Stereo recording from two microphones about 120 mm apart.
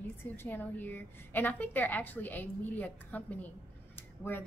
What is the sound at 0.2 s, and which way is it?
A woman's voice, 15° left (ahead or behind).